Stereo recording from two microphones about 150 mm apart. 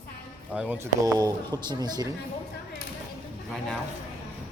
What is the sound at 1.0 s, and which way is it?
Speech, 25° right (ahead or behind).